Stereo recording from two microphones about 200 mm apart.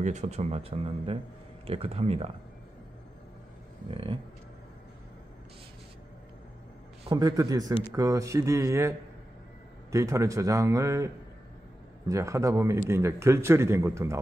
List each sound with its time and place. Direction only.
0.0 s speech: 35° right (ahead or behind)
3.9 s speech: 25° right (ahead or behind)
7.1 s a man's voice: 20° right (ahead or behind)
12.1 s a man's voice: 15° right (ahead or behind)